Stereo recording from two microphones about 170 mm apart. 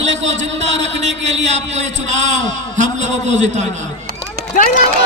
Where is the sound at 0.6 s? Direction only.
40° right (ahead or behind).